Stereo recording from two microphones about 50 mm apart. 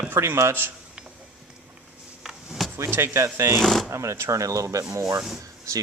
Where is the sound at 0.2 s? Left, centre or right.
Right.